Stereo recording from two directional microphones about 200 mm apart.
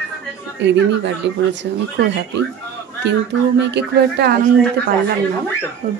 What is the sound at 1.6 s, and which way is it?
Speech, 60° right (ahead or behind).